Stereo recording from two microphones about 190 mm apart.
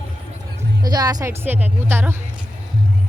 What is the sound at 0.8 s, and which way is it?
Speech, 20° right (ahead or behind).